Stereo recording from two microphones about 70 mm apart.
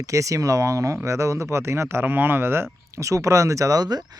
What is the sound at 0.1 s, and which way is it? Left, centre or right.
Speech, right.